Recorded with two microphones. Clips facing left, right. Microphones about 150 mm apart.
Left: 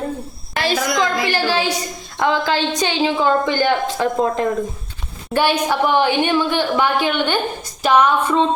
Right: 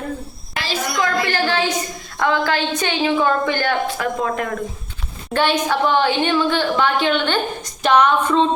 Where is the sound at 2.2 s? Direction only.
20° left (ahead or behind).